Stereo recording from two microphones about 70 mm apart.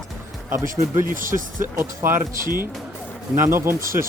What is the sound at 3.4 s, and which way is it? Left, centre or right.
Speech, right.